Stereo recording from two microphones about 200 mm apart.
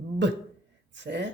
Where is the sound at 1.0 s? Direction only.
60° right (ahead or behind).